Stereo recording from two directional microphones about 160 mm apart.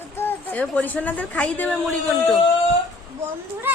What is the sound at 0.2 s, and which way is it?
A woman's voice, 10° left (ahead or behind).